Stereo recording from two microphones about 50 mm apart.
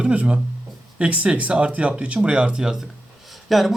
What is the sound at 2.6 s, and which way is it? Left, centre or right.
Speech, centre.